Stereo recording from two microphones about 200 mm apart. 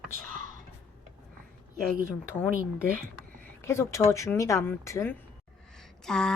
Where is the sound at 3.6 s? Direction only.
15° left (ahead or behind).